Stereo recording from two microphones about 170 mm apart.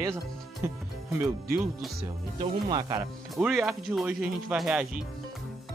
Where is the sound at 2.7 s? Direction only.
20° right (ahead or behind).